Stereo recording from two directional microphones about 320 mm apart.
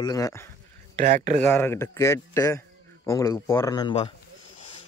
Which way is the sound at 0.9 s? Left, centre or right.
Right.